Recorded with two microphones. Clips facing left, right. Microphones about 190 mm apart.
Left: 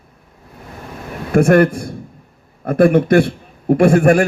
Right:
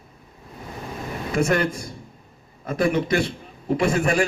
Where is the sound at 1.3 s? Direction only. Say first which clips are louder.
Left 10 dB; 60° left (ahead or behind).